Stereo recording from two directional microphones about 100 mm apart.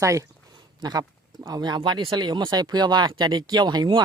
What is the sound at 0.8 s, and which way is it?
Speech, 40° right (ahead or behind).